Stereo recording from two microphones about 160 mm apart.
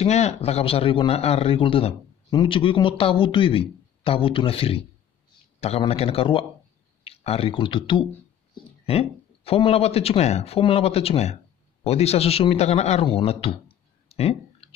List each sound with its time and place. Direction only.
0.0 s speech: 45° left (ahead or behind)
14.0 s clicking: 40° left (ahead or behind)